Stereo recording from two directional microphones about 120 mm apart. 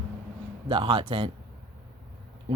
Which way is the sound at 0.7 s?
45° right (ahead or behind).